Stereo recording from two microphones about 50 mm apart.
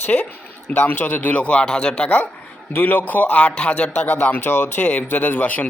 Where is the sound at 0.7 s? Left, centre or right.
Left.